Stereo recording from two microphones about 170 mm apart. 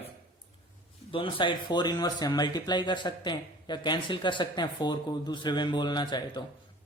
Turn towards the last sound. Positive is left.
turn(degrees=25)  # may be behind; listen again after turning